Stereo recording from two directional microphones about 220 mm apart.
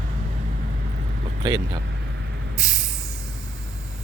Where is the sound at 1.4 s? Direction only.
20° right (ahead or behind).